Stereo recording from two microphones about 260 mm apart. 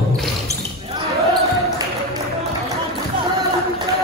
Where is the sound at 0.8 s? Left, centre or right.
Right.